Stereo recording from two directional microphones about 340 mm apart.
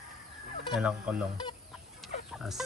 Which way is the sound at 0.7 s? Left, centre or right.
Centre.